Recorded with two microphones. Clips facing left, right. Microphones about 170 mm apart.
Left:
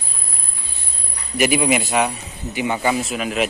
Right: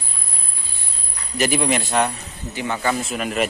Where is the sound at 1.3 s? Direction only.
10° left (ahead or behind).